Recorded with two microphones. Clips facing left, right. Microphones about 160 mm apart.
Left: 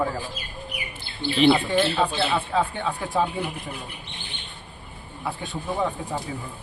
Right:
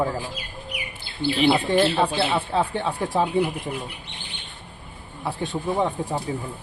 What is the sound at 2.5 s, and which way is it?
Speech, 30° right (ahead or behind).